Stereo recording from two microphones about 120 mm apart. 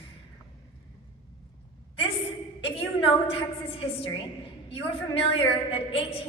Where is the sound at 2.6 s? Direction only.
50° left (ahead or behind).